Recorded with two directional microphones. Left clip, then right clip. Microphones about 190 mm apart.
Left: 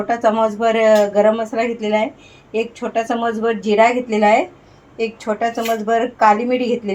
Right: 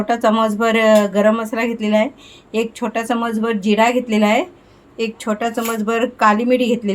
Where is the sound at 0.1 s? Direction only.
50° right (ahead or behind).